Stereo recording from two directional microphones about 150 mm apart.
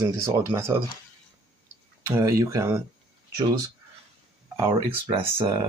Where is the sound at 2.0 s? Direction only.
20° right (ahead or behind).